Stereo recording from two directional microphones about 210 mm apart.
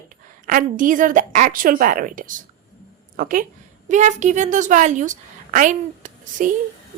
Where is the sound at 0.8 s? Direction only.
40° right (ahead or behind).